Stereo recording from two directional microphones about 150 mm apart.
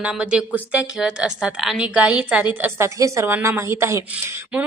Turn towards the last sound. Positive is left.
turn(degrees=-15)  # may be behind; listen again after turning